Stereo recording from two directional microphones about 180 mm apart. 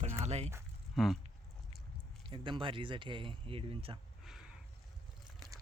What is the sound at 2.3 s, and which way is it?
Speech, 30° right (ahead or behind).